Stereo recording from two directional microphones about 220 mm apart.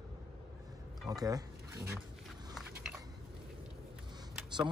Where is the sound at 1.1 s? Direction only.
15° right (ahead or behind).